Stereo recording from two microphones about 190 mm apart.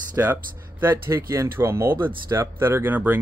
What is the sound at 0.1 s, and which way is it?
Speech, 10° right (ahead or behind).